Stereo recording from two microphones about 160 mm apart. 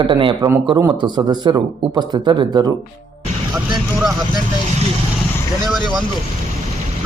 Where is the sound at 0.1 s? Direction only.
30° right (ahead or behind).